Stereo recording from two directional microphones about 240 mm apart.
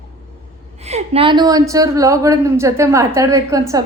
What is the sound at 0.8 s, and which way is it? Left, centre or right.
A woman's voice, right.